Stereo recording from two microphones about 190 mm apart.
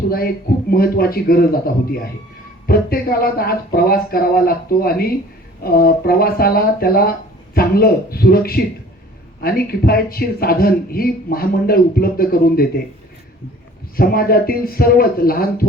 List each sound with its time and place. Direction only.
0.1 s speech: 50° left (ahead or behind)
13.9 s speech: 50° left (ahead or behind)